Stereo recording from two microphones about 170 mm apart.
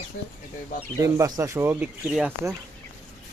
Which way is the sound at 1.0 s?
20° right (ahead or behind).